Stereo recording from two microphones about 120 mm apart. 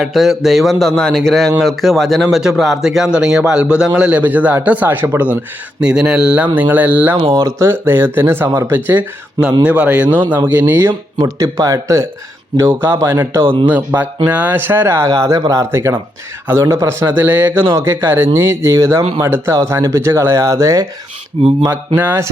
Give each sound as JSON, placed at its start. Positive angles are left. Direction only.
{"t": 0.0, "sound": "a man's voice", "side_deg": 0}
{"t": 7.3, "sound": "a man's voice", "side_deg": -25}
{"t": 11.2, "sound": "speech", "side_deg": -30}
{"t": 21.9, "sound": "a man's voice", "side_deg": -15}